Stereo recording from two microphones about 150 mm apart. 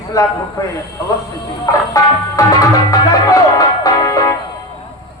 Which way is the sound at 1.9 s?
20° left (ahead or behind).